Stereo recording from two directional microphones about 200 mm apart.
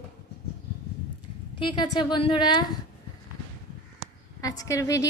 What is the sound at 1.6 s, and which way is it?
A woman's voice, 20° left (ahead or behind).